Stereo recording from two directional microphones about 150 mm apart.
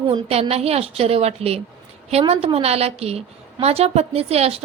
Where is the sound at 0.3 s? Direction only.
40° right (ahead or behind).